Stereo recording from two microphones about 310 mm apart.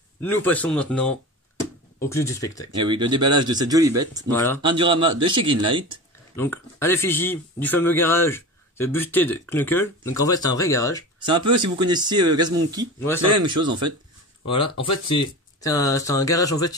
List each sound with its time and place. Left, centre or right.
0.2 s a man's voice: centre
2.7 s speech: centre
6.3 s a man's voice: centre
11.1 s speech: centre
14.5 s a man's voice: centre